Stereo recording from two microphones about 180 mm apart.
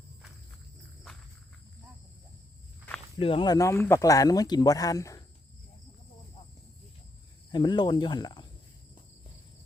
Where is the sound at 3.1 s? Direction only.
30° left (ahead or behind).